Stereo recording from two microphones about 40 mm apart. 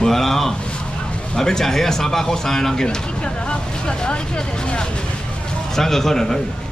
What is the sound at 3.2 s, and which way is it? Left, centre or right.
Speech, left.